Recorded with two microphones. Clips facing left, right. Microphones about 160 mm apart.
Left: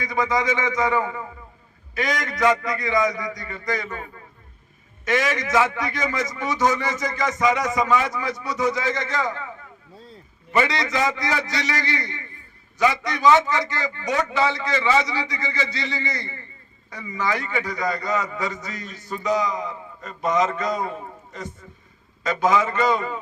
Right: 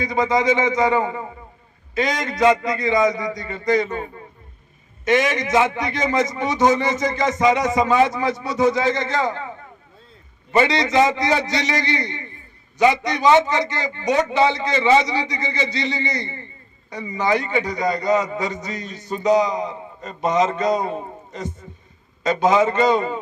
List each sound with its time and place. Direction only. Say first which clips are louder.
0.0 s a man's voice: right 4 dB; 25° right (ahead or behind)